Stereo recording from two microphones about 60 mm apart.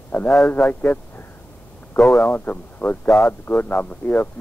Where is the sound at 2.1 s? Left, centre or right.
Left.